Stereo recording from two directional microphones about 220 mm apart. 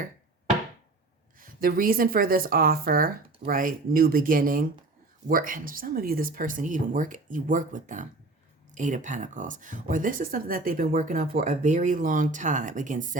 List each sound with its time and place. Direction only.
1.4 s speech: 40° right (ahead or behind)